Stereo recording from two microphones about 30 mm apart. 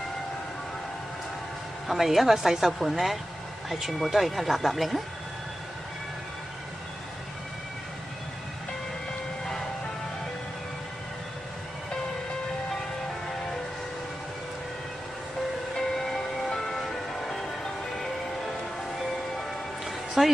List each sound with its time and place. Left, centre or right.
1.9 s speech: centre
15.7 s music: centre
20.2 s a woman's voice: right